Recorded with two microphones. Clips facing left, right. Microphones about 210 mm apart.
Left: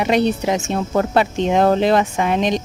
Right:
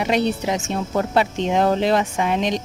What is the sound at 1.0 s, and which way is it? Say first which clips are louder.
Speech: left 3 dB; 60° left (ahead or behind).